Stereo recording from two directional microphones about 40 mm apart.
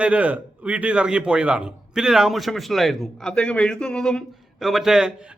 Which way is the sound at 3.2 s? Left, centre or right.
Left.